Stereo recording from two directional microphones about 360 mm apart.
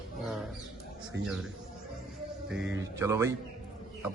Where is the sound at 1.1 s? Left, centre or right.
Right.